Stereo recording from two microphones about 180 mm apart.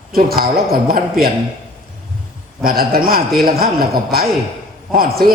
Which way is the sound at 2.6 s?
55° right (ahead or behind).